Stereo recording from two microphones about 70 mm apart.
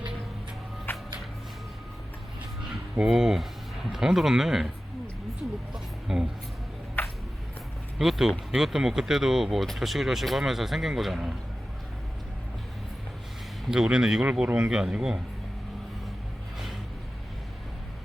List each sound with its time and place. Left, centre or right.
0.9 s music: left
2.9 s a man's voice: centre
5.7 s speech: centre
7.0 s a sound: left
7.9 s speech: centre
13.7 s a man's voice: centre